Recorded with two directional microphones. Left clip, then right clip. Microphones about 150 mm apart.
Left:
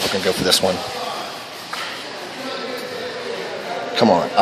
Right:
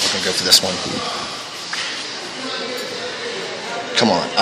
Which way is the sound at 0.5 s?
15° left (ahead or behind).